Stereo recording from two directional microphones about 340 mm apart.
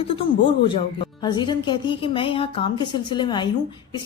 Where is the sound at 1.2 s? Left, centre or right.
Centre.